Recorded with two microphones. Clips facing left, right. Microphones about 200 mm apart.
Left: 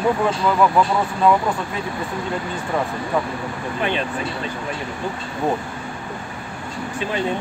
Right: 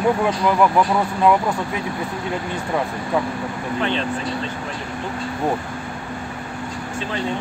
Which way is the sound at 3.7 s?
15° left (ahead or behind).